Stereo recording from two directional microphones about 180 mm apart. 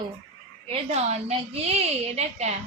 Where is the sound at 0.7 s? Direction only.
35° right (ahead or behind).